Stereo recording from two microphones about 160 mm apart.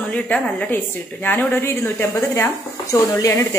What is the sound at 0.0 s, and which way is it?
A woman's voice, 5° left (ahead or behind).